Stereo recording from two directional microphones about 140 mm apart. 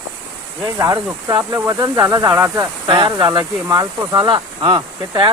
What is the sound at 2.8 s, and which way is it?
Speech, 30° right (ahead or behind).